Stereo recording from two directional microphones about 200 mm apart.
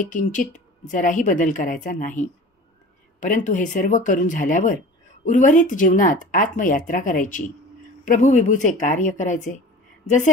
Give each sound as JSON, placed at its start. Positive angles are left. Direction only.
{"t": 0.0, "sound": "a woman's voice", "side_deg": 40}